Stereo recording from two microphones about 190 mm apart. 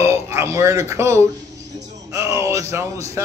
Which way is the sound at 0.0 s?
15° right (ahead or behind).